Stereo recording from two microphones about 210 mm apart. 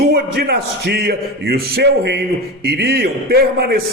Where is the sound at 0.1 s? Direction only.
45° right (ahead or behind).